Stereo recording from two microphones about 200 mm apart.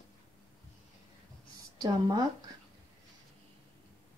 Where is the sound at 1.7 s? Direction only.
20° right (ahead or behind).